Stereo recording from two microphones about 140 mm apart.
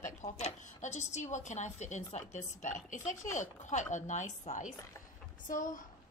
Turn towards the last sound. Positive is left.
turn(degrees=70)  # may be behind; listen again after turning